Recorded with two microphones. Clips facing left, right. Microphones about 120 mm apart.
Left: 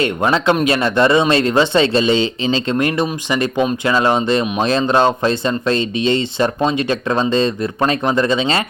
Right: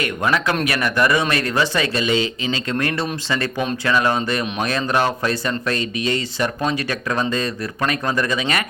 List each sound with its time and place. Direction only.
0.0 s speech: 25° left (ahead or behind)